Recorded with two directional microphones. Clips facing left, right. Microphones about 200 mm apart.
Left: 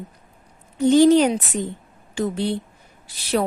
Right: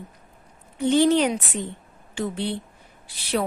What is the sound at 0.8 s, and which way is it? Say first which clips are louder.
A woman's voice: left 5 dB; 40° left (ahead or behind).